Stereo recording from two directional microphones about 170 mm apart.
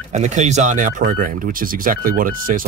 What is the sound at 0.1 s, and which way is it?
Speech, 45° right (ahead or behind).